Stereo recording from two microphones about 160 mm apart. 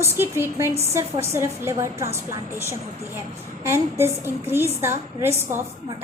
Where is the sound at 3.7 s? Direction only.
15° right (ahead or behind).